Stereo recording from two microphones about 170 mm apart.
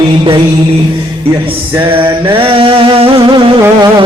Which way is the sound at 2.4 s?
30° right (ahead or behind).